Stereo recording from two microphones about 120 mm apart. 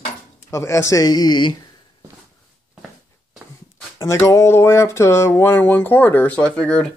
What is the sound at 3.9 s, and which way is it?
Speech, 25° left (ahead or behind).